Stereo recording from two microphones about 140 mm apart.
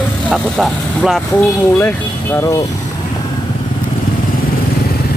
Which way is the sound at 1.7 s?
20° left (ahead or behind).